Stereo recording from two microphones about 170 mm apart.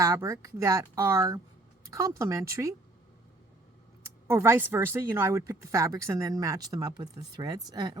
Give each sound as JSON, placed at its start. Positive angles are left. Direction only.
{"t": 0.0, "sound": "speech", "side_deg": -20}
{"t": 4.3, "sound": "speech", "side_deg": -15}